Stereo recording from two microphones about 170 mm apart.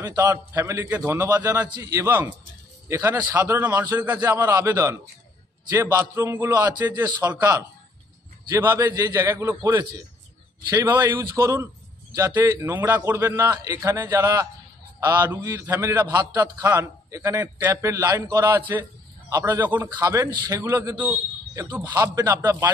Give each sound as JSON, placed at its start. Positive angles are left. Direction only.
{"t": 0.0, "sound": "a man's voice", "side_deg": -20}